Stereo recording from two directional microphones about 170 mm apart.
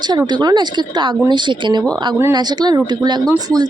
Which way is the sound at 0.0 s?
25° right (ahead or behind).